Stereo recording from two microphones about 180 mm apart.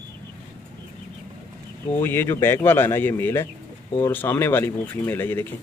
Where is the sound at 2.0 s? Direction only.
10° left (ahead or behind).